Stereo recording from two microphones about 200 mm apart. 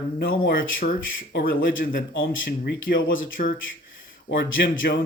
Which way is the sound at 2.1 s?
70° left (ahead or behind).